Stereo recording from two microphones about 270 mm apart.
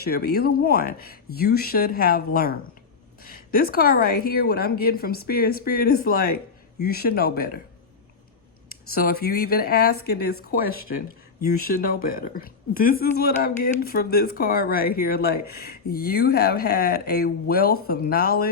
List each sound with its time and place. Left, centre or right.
0.0 s a woman's voice: left
9.0 s a woman's voice: left